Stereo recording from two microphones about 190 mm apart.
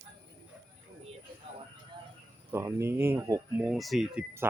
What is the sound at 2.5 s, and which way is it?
Speech, 15° right (ahead or behind).